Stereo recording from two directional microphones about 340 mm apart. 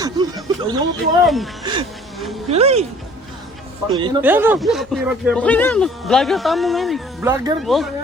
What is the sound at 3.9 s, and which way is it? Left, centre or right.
Speech, centre.